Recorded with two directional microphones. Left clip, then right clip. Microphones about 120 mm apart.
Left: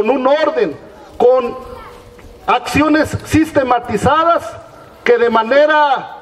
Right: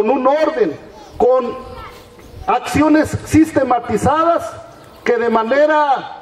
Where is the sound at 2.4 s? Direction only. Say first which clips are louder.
Left 1 dB; 30° left (ahead or behind).